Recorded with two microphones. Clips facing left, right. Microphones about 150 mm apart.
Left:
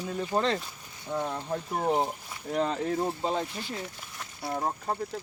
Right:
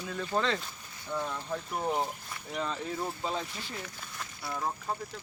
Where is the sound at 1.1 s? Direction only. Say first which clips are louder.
Left 3 dB; 30° left (ahead or behind).